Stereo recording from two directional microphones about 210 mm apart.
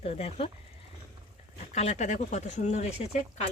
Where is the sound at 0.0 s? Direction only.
30° left (ahead or behind).